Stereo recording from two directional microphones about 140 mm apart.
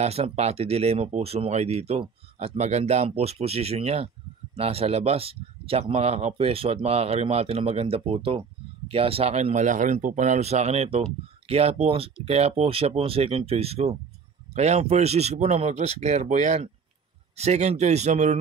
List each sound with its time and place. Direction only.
0.0 s speech: 50° right (ahead or behind)